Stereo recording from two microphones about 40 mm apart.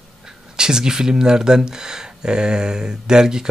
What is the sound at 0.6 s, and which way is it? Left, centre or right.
Speech, centre.